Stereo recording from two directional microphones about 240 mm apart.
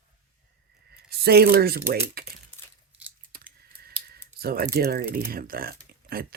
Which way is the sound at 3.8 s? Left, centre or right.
Right.